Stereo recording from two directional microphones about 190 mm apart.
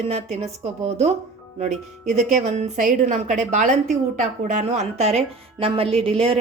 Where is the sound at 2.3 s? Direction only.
35° right (ahead or behind).